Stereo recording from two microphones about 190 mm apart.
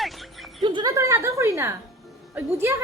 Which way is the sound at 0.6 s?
25° right (ahead or behind).